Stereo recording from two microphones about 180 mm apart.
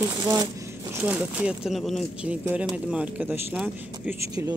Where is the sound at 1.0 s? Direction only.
5° right (ahead or behind).